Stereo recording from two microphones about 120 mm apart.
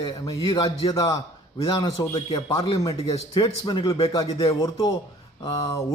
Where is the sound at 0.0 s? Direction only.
35° left (ahead or behind).